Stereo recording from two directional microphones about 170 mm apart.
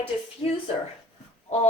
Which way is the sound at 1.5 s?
40° left (ahead or behind).